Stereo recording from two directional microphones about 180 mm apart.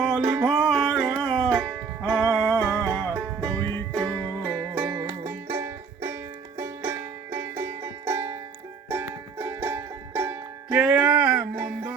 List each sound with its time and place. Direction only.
0.0 s music: 5° right (ahead or behind)
5.0 s music: 15° right (ahead or behind)